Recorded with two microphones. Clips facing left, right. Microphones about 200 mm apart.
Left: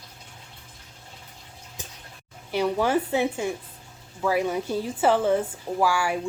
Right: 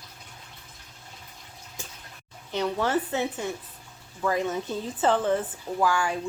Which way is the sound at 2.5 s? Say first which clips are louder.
Left 3 dB; 10° left (ahead or behind).